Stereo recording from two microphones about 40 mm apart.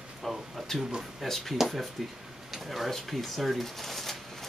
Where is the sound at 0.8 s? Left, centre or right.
Centre.